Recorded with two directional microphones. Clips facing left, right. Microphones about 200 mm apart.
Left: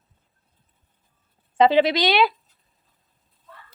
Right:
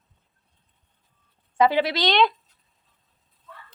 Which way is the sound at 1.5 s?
20° left (ahead or behind).